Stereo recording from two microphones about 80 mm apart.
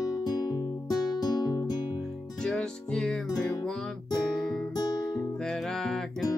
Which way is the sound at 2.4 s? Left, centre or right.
Centre.